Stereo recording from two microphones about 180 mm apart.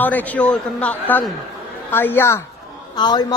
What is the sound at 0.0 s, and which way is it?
Speech, 10° left (ahead or behind).